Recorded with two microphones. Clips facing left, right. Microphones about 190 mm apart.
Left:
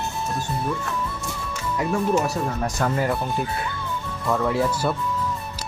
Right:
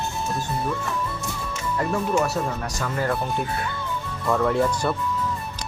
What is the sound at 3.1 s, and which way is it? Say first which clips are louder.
Speech: even; centre (ahead or behind).